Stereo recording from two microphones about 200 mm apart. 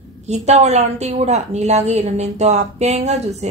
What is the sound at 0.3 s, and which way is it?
Speech, 35° right (ahead or behind).